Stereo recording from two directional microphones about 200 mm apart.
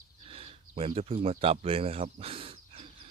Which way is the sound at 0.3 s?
30° right (ahead or behind).